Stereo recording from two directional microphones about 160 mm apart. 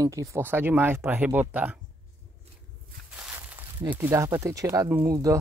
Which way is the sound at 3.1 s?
10° right (ahead or behind).